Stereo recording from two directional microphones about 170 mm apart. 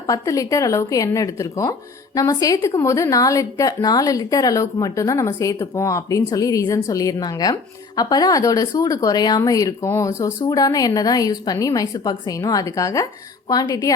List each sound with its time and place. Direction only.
0.1 s a woman's voice: 20° left (ahead or behind)